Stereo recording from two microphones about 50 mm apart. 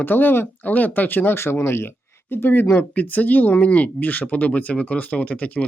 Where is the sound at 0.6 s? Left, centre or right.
Left.